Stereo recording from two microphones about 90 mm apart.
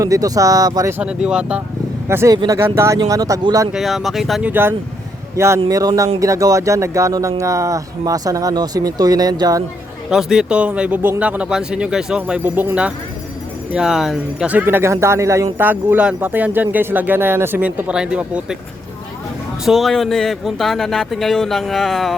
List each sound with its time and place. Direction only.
0.0 s speech: 40° right (ahead or behind)
1.0 s speech: 10° right (ahead or behind)
2.0 s speech: 30° right (ahead or behind)
2.3 s speech: 45° right (ahead or behind)
2.6 s speech: 30° right (ahead or behind)
3.0 s speech: 40° right (ahead or behind)
3.7 s speech: centre (ahead or behind)
4.4 s speech: 25° right (ahead or behind)
5.6 s speech: 45° right (ahead or behind)
10.1 s speech: 5° right (ahead or behind)
13.7 s speech: 5° right (ahead or behind)
14.5 s speech: 25° right (ahead or behind)
15.5 s speech: 20° right (ahead or behind)
19.6 s speech: centre (ahead or behind)